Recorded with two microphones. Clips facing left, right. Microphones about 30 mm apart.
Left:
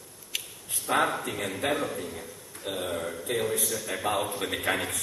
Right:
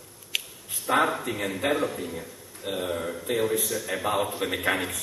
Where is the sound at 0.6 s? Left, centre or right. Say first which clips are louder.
Right 2 dB; centre.